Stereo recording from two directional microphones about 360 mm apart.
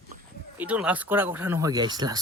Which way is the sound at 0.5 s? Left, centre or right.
Centre.